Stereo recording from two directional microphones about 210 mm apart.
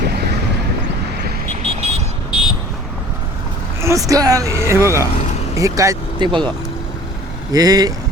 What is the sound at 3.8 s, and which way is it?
Vehicle, 15° right (ahead or behind).